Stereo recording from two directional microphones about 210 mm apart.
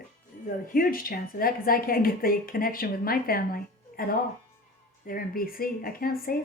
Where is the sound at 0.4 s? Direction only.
45° left (ahead or behind).